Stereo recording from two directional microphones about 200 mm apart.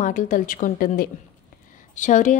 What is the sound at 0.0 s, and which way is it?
A woman's voice, 40° left (ahead or behind).